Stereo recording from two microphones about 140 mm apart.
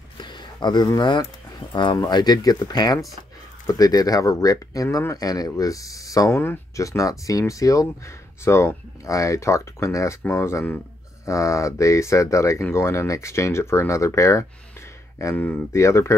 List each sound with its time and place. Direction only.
0.2 s speech: 30° left (ahead or behind)